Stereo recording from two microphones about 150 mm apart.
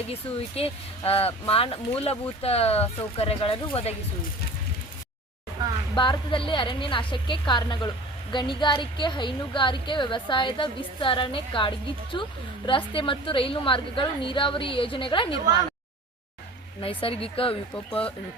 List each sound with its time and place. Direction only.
0.1 s speech: 40° left (ahead or behind)
5.9 s speech: 30° left (ahead or behind)
16.8 s speech: 35° left (ahead or behind)